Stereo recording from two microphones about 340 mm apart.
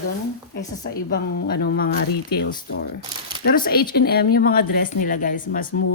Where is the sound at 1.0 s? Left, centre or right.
Left.